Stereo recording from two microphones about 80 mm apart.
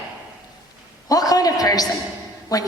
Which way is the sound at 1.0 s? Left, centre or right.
Left.